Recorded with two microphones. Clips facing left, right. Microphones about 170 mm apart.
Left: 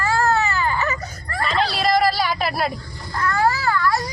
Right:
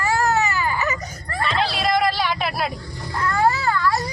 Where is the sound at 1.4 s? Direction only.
Centre (ahead or behind).